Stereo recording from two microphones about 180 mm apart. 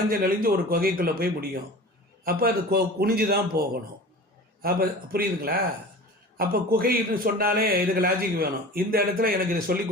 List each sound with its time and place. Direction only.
0.1 s a man's voice: 55° right (ahead or behind)